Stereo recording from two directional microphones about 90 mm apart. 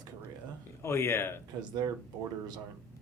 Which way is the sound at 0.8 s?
30° left (ahead or behind).